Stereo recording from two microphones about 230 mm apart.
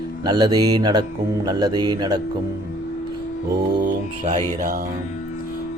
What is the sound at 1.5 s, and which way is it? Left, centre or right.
Speech, centre.